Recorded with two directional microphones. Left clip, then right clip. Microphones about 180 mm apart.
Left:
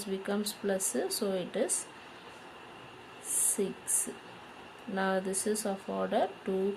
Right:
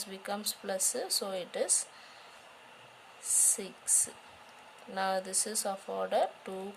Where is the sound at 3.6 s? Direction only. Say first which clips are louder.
Left 9 dB; 40° right (ahead or behind).